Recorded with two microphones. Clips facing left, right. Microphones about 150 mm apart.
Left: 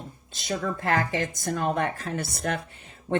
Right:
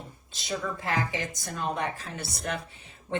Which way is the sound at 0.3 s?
50° left (ahead or behind).